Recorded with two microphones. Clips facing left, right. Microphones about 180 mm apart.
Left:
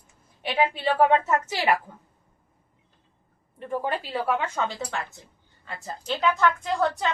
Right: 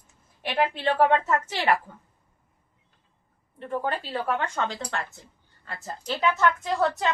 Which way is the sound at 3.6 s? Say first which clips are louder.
Left 1 dB; 10° left (ahead or behind).